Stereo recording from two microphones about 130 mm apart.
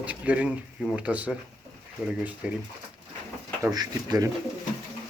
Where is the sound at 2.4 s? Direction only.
10° right (ahead or behind).